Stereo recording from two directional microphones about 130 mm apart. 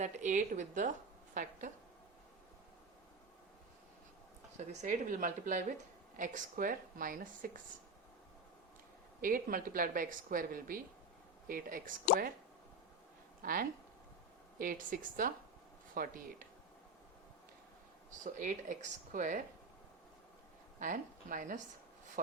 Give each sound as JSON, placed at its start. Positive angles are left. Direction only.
{"t": 0.0, "sound": "a woman's voice", "side_deg": -70}
{"t": 1.3, "sound": "a woman's voice", "side_deg": -90}
{"t": 4.5, "sound": "speech", "side_deg": -65}
{"t": 9.2, "sound": "a woman's voice", "side_deg": -90}
{"t": 13.4, "sound": "a woman's voice", "side_deg": -90}
{"t": 18.2, "sound": "speech", "side_deg": -80}
{"t": 20.7, "sound": "speech", "side_deg": -90}